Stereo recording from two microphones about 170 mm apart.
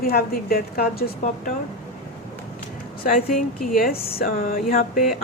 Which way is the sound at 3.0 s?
60° left (ahead or behind).